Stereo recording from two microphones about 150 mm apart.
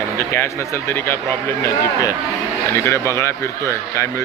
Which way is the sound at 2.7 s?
20° left (ahead or behind).